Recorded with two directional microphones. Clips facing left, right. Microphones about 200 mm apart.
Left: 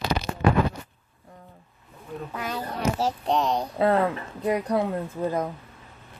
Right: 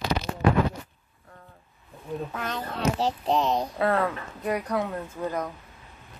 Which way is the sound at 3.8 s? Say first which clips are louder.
Left 7 dB; 25° left (ahead or behind).